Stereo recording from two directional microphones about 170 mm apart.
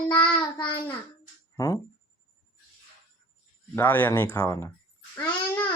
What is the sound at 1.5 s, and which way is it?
Speech, 20° left (ahead or behind).